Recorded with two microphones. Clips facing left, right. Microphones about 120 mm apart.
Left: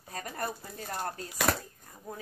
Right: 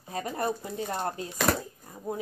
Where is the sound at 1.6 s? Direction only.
25° right (ahead or behind).